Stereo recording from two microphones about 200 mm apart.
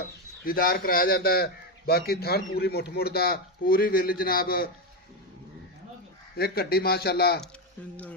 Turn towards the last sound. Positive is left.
turn(degrees=50)  # may be behind; listen again after turning